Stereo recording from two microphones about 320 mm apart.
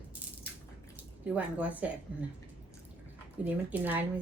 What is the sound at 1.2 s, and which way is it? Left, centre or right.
A woman's voice, centre.